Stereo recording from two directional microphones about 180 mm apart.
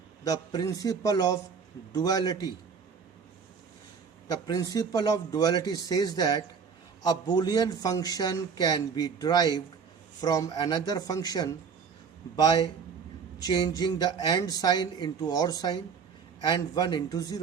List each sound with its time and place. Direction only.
0.3 s a man's voice: 20° left (ahead or behind)
4.3 s a man's voice: 20° left (ahead or behind)